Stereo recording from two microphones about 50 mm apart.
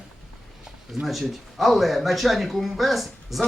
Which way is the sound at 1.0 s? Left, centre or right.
Centre.